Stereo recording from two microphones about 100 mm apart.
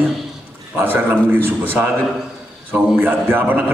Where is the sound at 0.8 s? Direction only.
20° right (ahead or behind).